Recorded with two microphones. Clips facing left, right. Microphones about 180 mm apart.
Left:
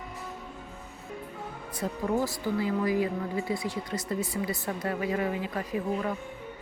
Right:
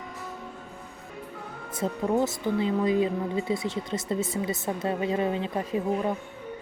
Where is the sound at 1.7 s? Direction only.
25° right (ahead or behind).